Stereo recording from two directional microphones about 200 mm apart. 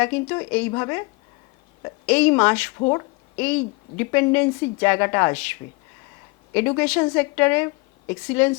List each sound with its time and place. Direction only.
0.0 s a woman's voice: 10° left (ahead or behind)
2.0 s a woman's voice: 5° left (ahead or behind)
2.7 s speech: 20° left (ahead or behind)
3.3 s a woman's voice: 5° left (ahead or behind)
6.5 s a woman's voice: 10° left (ahead or behind)